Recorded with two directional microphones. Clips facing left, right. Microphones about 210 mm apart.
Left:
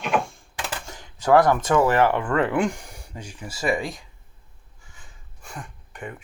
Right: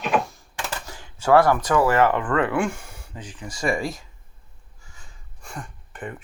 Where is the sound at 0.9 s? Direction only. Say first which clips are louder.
Even; 15° left (ahead or behind); by 4.0 s centre (ahead or behind).